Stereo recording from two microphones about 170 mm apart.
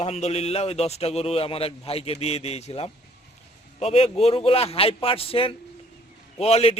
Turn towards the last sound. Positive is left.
turn(degrees=35)  # may be behind; listen again after turning